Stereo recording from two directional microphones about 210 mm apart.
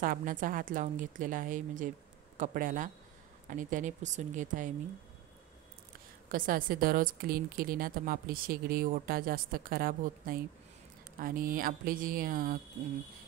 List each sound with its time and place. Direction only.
0.0 s a woman's voice: 40° right (ahead or behind)
6.2 s a woman's voice: 40° right (ahead or behind)